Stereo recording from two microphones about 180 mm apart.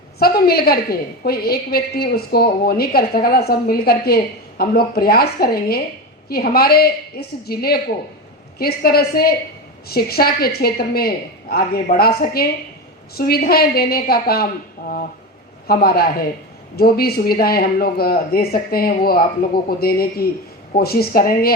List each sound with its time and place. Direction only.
0.2 s a woman's voice: 60° left (ahead or behind)
15.6 s a woman's voice: 55° left (ahead or behind)